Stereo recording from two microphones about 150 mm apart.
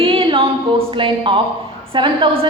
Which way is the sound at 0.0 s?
35° right (ahead or behind).